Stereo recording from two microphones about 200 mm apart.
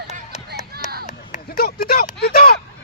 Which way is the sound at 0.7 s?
55° right (ahead or behind).